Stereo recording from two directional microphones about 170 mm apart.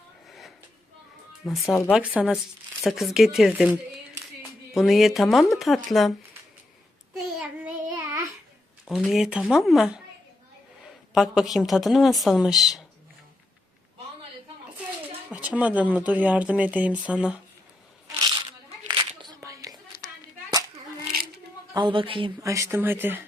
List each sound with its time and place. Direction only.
0.3 s a sound: centre (ahead or behind)
1.3 s a woman's voice: centre (ahead or behind)
7.1 s child singing: 5° right (ahead or behind)
8.8 s a woman's voice: centre (ahead or behind)
11.1 s a woman's voice: centre (ahead or behind)
15.3 s speech: 10° right (ahead or behind)
18.9 s a sound: 25° right (ahead or behind)
21.7 s a woman's voice: 25° right (ahead or behind)
22.4 s speech: 20° right (ahead or behind)